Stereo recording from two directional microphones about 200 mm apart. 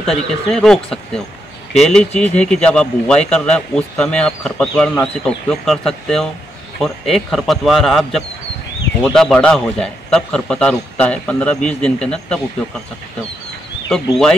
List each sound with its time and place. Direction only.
0.0 s a man's voice: centre (ahead or behind)